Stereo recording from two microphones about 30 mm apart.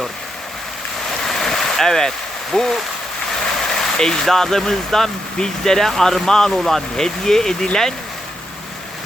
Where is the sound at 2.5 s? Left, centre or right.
Left.